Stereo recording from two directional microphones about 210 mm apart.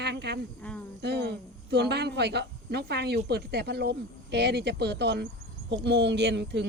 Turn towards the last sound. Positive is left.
turn(degrees=-55)  # may be behind; listen again after turning